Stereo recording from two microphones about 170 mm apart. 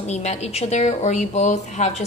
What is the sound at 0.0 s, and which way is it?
A woman's voice, 40° left (ahead or behind).